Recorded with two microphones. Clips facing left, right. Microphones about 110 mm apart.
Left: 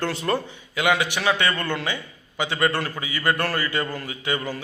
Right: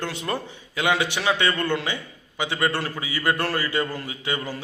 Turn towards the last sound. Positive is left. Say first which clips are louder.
# left 2 dB
turn(degrees=-25)  # may be behind; listen again after turning